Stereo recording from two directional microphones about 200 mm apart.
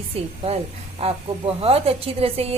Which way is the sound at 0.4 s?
30° right (ahead or behind).